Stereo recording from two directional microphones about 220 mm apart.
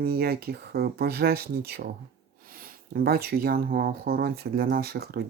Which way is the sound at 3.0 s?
45° right (ahead or behind).